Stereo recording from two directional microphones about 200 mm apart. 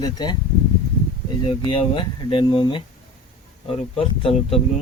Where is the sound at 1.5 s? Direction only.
25° left (ahead or behind).